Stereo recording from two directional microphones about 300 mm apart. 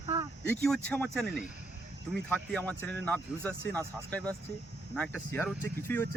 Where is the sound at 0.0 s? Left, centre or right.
Centre.